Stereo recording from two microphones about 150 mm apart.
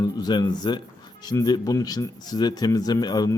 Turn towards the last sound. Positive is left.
turn(degrees=25)  # may be behind; listen again after turning